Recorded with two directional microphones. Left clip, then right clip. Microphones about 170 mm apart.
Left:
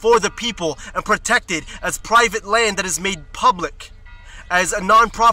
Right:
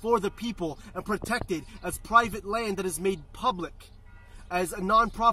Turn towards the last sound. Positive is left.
turn(degrees=25)  # may be behind; listen again after turning